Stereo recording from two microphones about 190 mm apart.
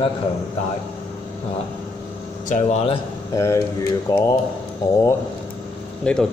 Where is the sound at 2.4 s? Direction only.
40° left (ahead or behind).